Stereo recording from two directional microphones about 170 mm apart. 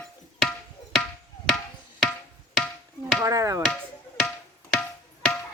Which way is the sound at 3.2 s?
20° right (ahead or behind).